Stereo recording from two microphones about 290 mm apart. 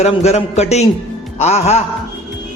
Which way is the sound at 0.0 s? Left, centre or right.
Left.